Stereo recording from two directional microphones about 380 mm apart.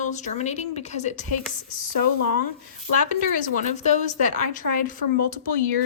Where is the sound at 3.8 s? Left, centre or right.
Centre.